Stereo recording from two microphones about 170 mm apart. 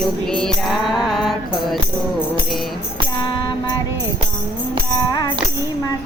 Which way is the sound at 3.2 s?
25° left (ahead or behind).